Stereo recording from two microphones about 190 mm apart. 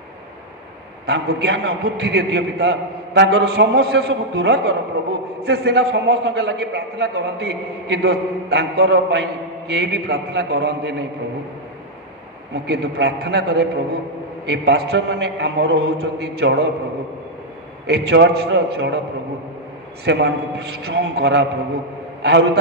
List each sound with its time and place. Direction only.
1.0 s a man's voice: 60° right (ahead or behind)
12.5 s a man's voice: 60° right (ahead or behind)
17.8 s a man's voice: 60° right (ahead or behind)
20.1 s a man's voice: 65° right (ahead or behind)